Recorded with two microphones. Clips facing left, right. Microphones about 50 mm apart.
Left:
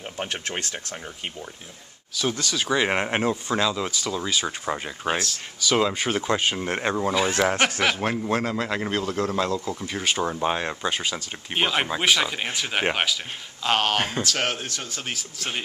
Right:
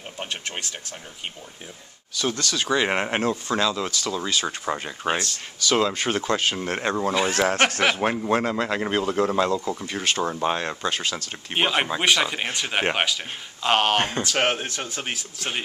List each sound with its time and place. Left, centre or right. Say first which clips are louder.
0.6 s speech: left 2 dB; left
2.1 s speech: even; centre
7.8 s speech: right 2 dB; centre
11.5 s speech: right 1 dB; centre
15.3 s speech: right 1 dB; centre